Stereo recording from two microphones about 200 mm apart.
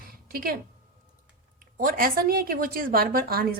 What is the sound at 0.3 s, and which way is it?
Speech, 45° right (ahead or behind).